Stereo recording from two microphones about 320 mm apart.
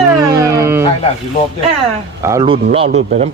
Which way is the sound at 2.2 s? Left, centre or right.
Centre.